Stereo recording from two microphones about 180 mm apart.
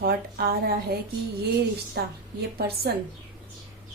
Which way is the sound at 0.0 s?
55° right (ahead or behind).